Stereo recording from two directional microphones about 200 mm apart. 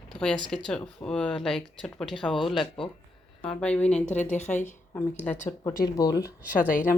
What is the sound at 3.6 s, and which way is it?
Speech, 5° left (ahead or behind).